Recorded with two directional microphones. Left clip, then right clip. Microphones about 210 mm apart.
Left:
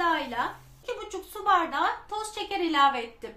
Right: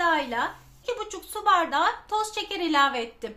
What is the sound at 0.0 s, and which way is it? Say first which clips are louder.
A woman's voice: right 3 dB; 45° right (ahead or behind).